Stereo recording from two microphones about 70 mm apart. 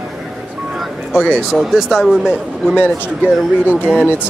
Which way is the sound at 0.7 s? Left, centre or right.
Centre.